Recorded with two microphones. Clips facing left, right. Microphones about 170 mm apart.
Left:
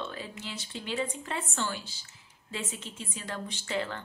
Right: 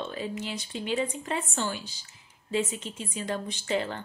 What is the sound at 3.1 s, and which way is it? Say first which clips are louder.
Speech: right 6 dB; 20° right (ahead or behind).